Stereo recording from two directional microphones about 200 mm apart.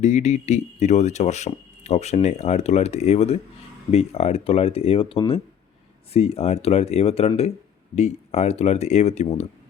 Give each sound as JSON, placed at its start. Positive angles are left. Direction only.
{"t": 0.0, "sound": "speech", "side_deg": 35}